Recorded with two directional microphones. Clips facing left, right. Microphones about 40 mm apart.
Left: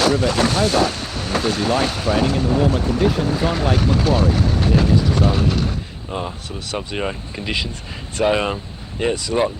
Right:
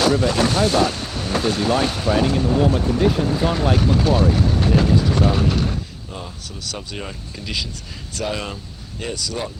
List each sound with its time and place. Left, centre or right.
0.0 s speech: left
6.1 s speech: left